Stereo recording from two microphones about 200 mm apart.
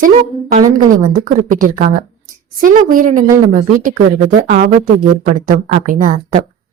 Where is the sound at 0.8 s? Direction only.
40° right (ahead or behind).